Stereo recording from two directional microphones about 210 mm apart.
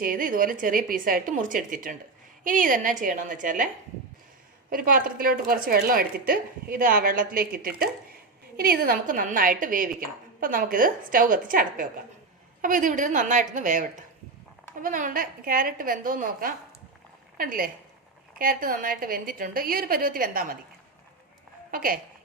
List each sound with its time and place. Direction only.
0.0 s a woman's voice: 40° right (ahead or behind)
4.7 s a woman's voice: 40° right (ahead or behind)
21.7 s a woman's voice: 40° right (ahead or behind)